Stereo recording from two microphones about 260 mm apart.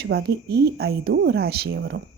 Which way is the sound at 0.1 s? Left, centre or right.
Right.